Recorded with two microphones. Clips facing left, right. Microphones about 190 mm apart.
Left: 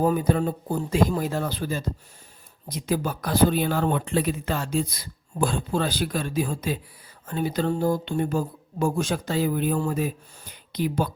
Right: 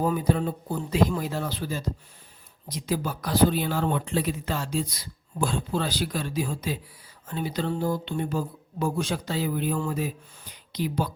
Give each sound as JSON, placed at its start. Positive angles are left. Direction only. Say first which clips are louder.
{"t": 0.0, "sound": "speech", "louder": "left 3 dB", "side_deg": 50}